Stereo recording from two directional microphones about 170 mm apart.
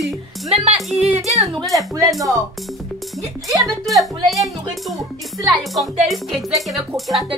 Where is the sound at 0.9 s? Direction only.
40° right (ahead or behind).